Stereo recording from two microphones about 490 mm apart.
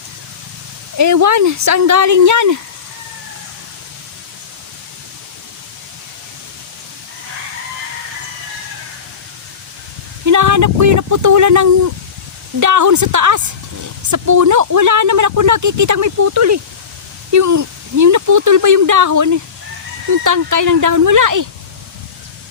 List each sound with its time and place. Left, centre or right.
0.9 s speech: right
10.2 s speech: right